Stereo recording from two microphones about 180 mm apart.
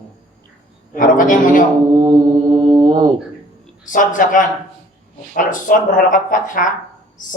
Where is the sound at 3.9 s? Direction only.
45° left (ahead or behind).